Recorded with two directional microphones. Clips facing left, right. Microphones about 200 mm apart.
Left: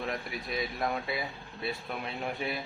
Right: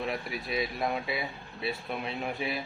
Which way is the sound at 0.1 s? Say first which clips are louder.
Right 2 dB; 5° right (ahead or behind).